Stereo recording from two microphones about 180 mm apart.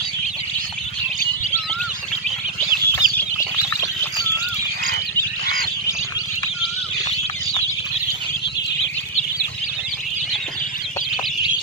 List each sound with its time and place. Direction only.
3.0 s chicken: 20° left (ahead or behind)